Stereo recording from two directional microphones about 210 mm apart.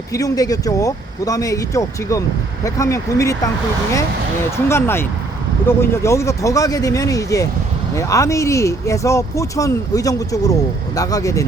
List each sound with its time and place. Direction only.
0.1 s speech: 15° left (ahead or behind)
4.5 s speech: 10° left (ahead or behind)